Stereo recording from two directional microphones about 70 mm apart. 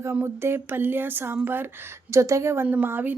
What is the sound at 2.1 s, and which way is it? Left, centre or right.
Speech, right.